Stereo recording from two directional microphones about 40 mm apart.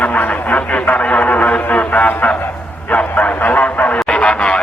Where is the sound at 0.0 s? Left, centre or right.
Left.